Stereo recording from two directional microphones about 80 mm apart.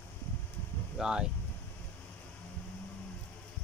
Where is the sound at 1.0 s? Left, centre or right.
Centre.